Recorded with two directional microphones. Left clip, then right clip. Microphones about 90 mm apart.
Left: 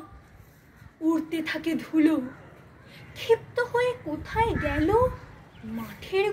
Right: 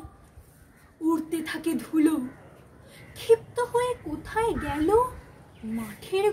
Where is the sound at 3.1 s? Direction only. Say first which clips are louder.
Right 2 dB; 50° right (ahead or behind).